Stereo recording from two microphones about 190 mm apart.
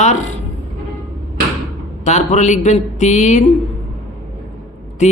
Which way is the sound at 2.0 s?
40° left (ahead or behind).